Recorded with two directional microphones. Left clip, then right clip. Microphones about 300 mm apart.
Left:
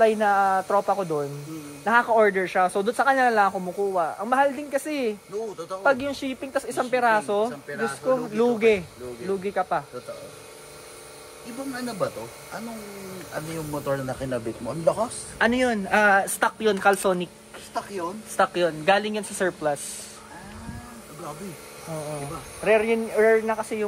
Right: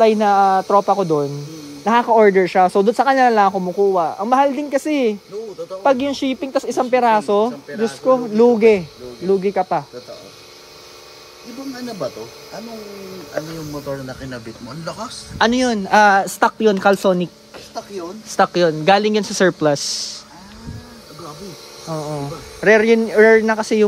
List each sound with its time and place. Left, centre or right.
0.0 s speech: right
15.3 s speech: centre
18.3 s speech: right
21.9 s speech: right